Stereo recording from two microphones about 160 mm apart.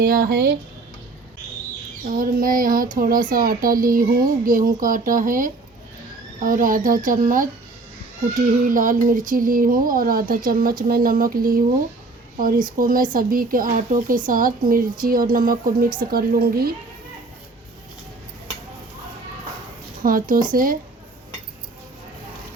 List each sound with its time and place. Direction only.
0.0 s speech: 75° right (ahead or behind)
2.0 s speech: 60° right (ahead or behind)
8.7 s speech: 55° right (ahead or behind)
12.8 s speech: 60° right (ahead or behind)
20.0 s speech: 60° right (ahead or behind)